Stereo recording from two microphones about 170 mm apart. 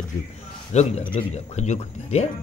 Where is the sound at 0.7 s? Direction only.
40° left (ahead or behind).